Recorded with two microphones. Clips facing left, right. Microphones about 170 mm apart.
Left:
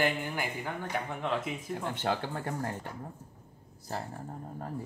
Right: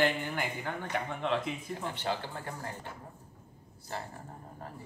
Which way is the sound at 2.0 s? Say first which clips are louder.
Left 4 dB; 55° left (ahead or behind).